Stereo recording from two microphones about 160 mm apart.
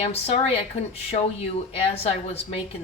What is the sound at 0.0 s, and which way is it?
A woman's voice, 40° left (ahead or behind).